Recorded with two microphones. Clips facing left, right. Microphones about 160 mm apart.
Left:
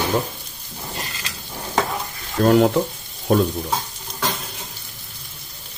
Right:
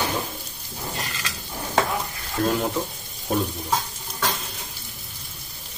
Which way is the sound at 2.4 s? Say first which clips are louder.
Left 10 dB; 75° left (ahead or behind).